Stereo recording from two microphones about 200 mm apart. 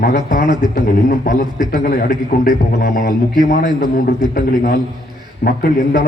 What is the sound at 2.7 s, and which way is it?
Speech, 55° left (ahead or behind).